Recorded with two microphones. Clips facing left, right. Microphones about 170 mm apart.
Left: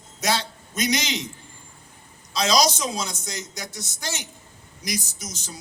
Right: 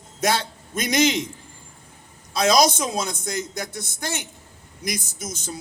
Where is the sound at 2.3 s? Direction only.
55° right (ahead or behind).